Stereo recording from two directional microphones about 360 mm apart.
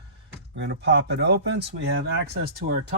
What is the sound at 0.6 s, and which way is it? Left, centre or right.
Speech, right.